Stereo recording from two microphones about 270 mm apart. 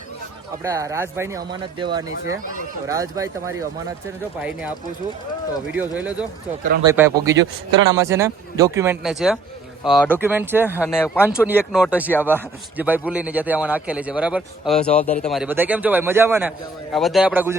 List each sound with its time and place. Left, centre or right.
0.6 s speech: centre
5.7 s a man's voice: centre
10.8 s speech: centre
11.3 s a man's voice: centre